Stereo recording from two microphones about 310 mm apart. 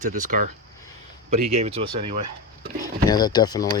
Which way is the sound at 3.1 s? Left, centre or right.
Centre.